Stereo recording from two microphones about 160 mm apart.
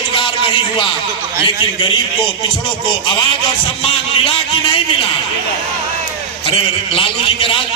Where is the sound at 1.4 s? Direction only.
30° left (ahead or behind).